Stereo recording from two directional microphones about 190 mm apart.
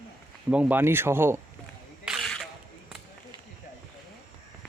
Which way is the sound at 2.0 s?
Centre (ahead or behind).